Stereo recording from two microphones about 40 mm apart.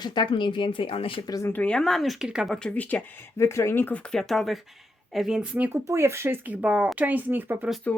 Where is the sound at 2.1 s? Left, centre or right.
Centre.